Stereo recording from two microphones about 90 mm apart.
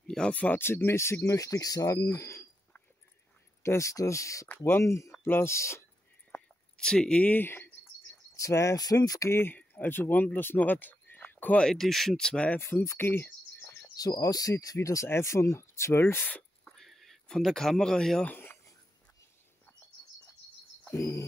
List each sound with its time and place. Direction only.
0.1 s speech: 10° left (ahead or behind); by 2.4 s 30° left (ahead or behind)
3.6 s speech: 35° left (ahead or behind)
4.5 s speech: 20° left (ahead or behind)
6.8 s speech: 10° left (ahead or behind); by 7.7 s 25° left (ahead or behind)
8.4 s speech: 35° left (ahead or behind)
9.3 s speech: 25° left (ahead or behind)
11.6 s speech: centre (ahead or behind)
12.5 s speech: 25° left (ahead or behind)
13.9 s speech: 45° left (ahead or behind); by 16.7 s 20° left (ahead or behind)
16.7 s a sound: centre (ahead or behind)
18.2 s a sound: 20° left (ahead or behind)
20.9 s speech: 35° left (ahead or behind)